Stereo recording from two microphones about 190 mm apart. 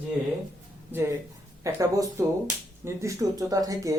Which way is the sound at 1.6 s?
15° right (ahead or behind).